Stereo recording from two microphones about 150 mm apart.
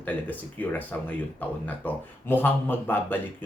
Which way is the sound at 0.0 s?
10° left (ahead or behind).